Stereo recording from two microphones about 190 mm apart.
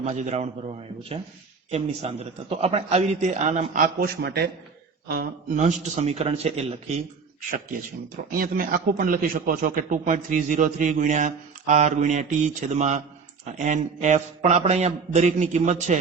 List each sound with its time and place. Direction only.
0.0 s speech: 35° right (ahead or behind)
4.0 s a man's voice: 55° right (ahead or behind)
5.5 s speech: 40° right (ahead or behind)
7.7 s speech: 50° right (ahead or behind)